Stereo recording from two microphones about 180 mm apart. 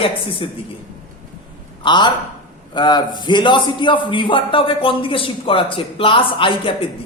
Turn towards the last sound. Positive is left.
turn(degrees=30)  # may be behind; listen again after turning